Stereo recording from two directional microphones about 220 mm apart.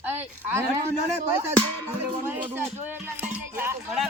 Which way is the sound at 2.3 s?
10° right (ahead or behind).